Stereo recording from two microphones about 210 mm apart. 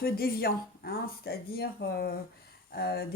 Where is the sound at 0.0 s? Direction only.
45° left (ahead or behind).